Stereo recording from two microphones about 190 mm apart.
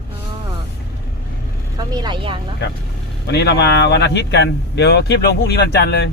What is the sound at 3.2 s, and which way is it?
Speech, 60° left (ahead or behind).